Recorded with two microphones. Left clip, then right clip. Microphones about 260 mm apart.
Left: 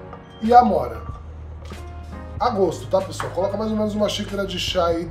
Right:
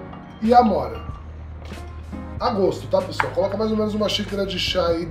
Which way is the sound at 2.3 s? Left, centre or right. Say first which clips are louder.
Left 1 dB; left.